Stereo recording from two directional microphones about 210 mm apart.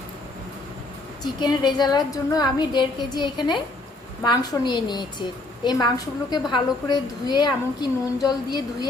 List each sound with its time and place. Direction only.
1.2 s a woman's voice: 20° left (ahead or behind)